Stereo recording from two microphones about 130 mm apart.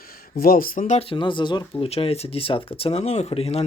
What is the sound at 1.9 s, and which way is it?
Speech, 50° left (ahead or behind).